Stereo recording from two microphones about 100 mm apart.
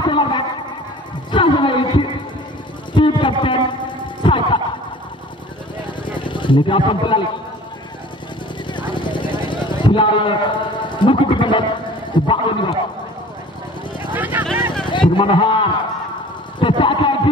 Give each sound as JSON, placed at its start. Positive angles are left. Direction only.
{"t": 0.0, "sound": "a sound", "side_deg": 55}
{"t": 1.3, "sound": "speech", "side_deg": 55}
{"t": 2.9, "sound": "a sound", "side_deg": 55}
{"t": 6.0, "sound": "speech", "side_deg": 55}
{"t": 8.6, "sound": "vehicle", "side_deg": 55}
{"t": 12.3, "sound": "a man's voice", "side_deg": 60}
{"t": 14.1, "sound": "vehicle", "side_deg": -15}
{"t": 14.9, "sound": "a man's voice", "side_deg": 55}
{"t": 16.5, "sound": "a sound", "side_deg": 55}